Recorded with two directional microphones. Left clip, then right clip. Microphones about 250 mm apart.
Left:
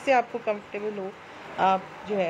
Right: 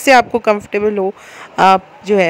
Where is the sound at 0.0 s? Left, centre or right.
Right.